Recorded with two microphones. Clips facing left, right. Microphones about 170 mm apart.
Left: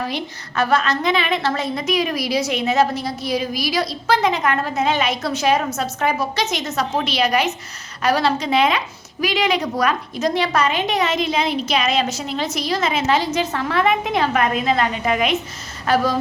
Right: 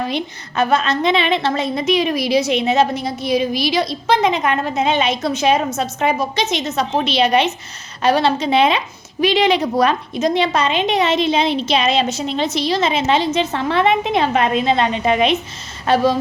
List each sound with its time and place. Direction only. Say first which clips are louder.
0.0 s a woman's voice: right 3 dB; 20° right (ahead or behind)